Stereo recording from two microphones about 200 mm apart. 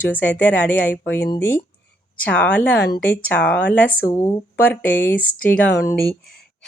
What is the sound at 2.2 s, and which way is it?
A woman's voice, 5° left (ahead or behind).